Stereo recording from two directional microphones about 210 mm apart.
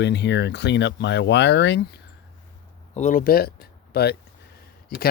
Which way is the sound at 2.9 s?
40° left (ahead or behind).